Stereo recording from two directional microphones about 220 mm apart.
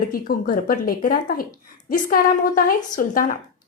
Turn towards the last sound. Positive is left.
turn(degrees=40)  # may be behind; listen again after turning